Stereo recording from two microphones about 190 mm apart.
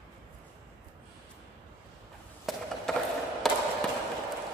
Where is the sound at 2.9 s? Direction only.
5° left (ahead or behind).